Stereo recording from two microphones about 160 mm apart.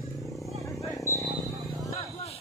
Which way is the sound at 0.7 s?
20° left (ahead or behind).